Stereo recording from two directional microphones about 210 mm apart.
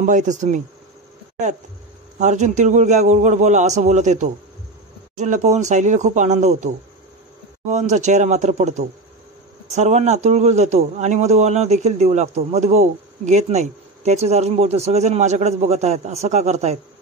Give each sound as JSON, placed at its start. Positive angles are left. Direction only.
{"t": 0.0, "sound": "a man's voice", "side_deg": -35}
{"t": 2.1, "sound": "a man's voice", "side_deg": -35}